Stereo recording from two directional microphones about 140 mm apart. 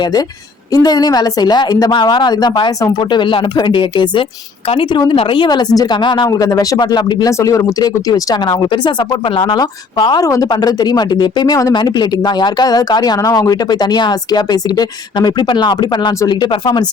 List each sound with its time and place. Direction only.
0.0 s a woman's voice: 30° left (ahead or behind)